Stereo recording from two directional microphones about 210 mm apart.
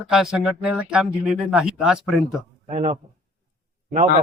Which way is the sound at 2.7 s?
35° right (ahead or behind).